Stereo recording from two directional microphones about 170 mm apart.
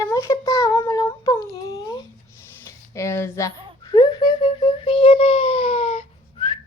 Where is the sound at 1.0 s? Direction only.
20° left (ahead or behind).